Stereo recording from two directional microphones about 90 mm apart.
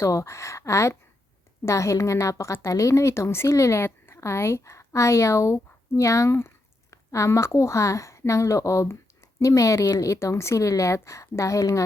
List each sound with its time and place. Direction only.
0.0 s a woman's voice: 35° left (ahead or behind)